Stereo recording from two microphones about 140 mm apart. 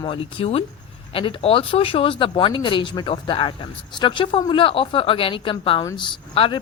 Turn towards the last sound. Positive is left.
turn(degrees=40)  # may be behind; listen again after turning